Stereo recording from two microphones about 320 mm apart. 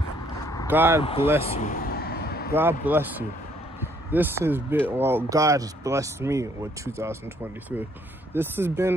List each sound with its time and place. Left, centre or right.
0.7 s speech: centre
1.4 s a sound: left
2.5 s speech: centre
8.3 s speech: centre